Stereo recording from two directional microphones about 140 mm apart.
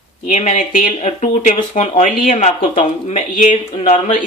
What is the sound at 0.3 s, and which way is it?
Speech, 50° left (ahead or behind).